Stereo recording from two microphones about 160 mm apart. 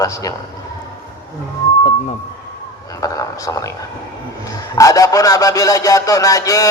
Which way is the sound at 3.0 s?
20° left (ahead or behind).